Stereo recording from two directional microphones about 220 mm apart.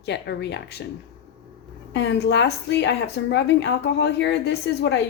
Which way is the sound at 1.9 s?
55° left (ahead or behind).